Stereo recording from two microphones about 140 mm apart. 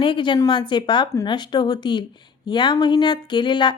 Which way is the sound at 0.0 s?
35° left (ahead or behind).